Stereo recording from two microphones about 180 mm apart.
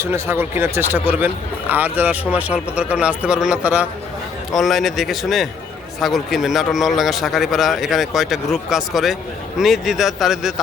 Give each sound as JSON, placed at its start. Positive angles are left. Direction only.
{"t": 0.0, "sound": "a man's voice", "side_deg": -15}